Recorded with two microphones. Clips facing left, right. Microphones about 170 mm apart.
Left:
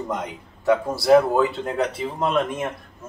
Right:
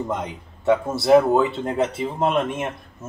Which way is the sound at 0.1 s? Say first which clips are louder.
Right 1 dB; 25° right (ahead or behind).